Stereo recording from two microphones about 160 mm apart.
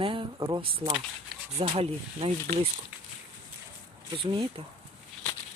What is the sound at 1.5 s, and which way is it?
Speech, 40° right (ahead or behind).